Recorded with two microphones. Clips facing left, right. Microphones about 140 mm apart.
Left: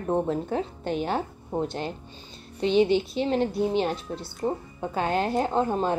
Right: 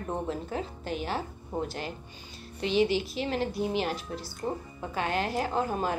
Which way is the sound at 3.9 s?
Centre (ahead or behind).